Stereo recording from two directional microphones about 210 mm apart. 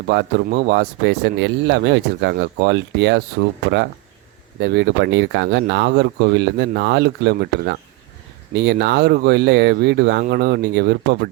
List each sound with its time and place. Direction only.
0.1 s speech: 55° right (ahead or behind)
4.6 s speech: 50° right (ahead or behind)